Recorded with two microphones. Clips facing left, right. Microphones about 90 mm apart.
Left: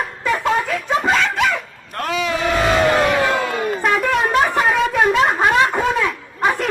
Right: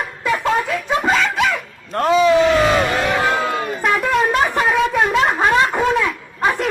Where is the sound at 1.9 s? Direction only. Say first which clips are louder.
Right 8 dB; 30° right (ahead or behind).